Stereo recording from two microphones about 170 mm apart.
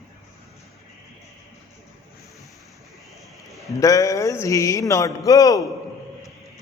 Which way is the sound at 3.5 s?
Centre (ahead or behind).